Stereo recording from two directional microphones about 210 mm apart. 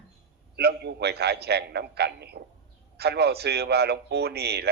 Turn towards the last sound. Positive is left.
turn(degrees=-50)  # may be behind; listen again after turning